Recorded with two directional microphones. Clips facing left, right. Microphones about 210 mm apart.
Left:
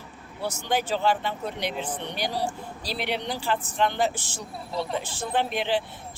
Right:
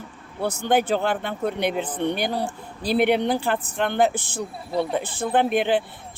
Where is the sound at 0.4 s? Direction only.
55° right (ahead or behind).